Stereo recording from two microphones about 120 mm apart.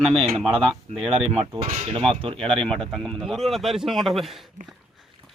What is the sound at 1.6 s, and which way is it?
Speech, 70° right (ahead or behind).